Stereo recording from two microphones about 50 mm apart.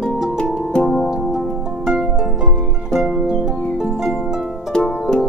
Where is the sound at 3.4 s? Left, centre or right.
Centre.